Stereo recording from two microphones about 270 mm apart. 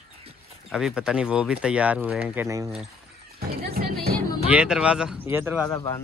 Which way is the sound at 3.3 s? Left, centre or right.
Right.